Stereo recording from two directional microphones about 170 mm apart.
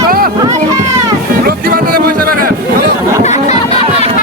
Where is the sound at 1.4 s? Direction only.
60° right (ahead or behind).